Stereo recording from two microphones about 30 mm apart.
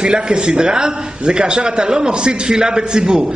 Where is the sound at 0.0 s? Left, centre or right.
Right.